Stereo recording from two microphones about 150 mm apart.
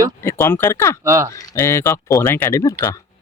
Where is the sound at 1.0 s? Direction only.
20° right (ahead or behind).